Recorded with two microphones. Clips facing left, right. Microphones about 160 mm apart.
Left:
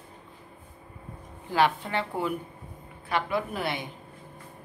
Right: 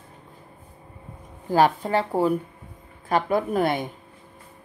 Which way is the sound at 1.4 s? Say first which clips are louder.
Right 5 dB; 40° right (ahead or behind).